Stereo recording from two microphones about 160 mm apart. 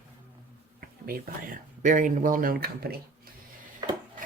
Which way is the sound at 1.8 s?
55° right (ahead or behind).